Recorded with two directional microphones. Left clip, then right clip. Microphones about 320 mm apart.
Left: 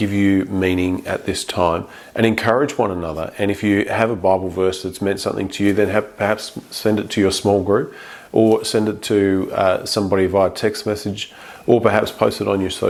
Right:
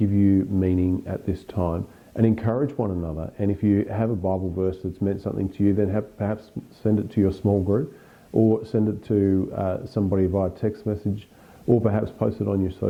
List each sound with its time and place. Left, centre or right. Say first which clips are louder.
0.0 s speech: left 4 dB; centre
7.4 s speech: left 7 dB; centre
8.3 s speech: left 6 dB; left
8.5 s speech: left 7 dB; centre